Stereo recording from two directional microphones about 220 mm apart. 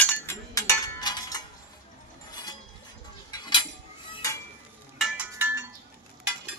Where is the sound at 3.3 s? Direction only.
20° left (ahead or behind).